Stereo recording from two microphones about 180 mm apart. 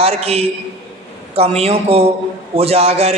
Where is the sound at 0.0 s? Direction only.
35° right (ahead or behind).